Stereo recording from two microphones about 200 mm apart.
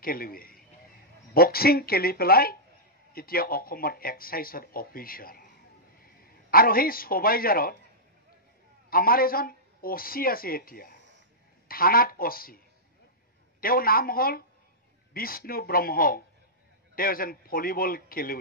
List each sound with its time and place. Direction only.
0.0 s a man's voice: 45° left (ahead or behind)
8.9 s speech: 45° left (ahead or behind)
13.6 s speech: 45° left (ahead or behind)